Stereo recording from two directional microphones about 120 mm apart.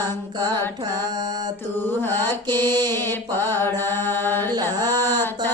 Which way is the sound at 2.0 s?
20° left (ahead or behind).